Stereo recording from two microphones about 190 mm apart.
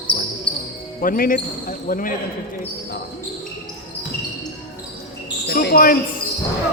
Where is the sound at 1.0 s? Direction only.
50° left (ahead or behind).